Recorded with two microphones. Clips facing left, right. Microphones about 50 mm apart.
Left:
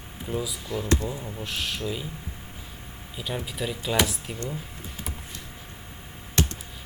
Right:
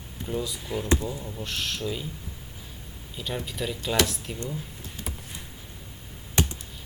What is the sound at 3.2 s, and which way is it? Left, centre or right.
Speech, centre.